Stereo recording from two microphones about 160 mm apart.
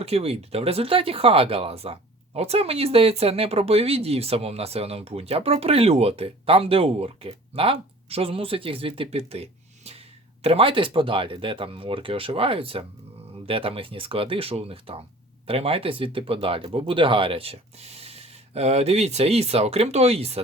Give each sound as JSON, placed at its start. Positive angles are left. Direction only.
{"t": 0.0, "sound": "speech", "side_deg": -40}